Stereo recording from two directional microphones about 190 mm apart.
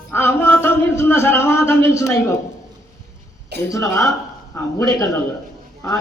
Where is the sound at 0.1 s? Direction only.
15° left (ahead or behind).